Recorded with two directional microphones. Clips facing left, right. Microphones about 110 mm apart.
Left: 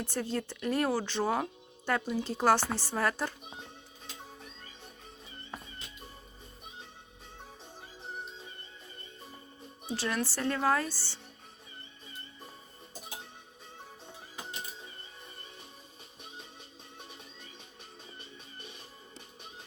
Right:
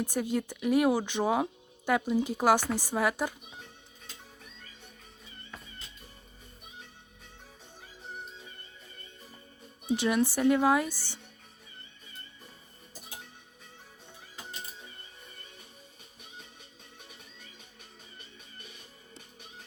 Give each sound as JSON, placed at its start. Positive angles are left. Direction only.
{"t": 0.0, "sound": "speech", "side_deg": -10}
{"t": 9.9, "sound": "speech", "side_deg": -20}